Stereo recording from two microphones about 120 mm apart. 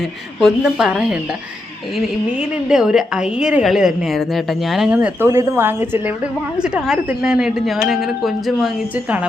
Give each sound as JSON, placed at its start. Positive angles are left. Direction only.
{"t": 0.3, "sound": "speech", "side_deg": 0}
{"t": 2.6, "sound": "speech", "side_deg": -5}
{"t": 4.9, "sound": "speech", "side_deg": -20}
{"t": 6.6, "sound": "speech", "side_deg": -5}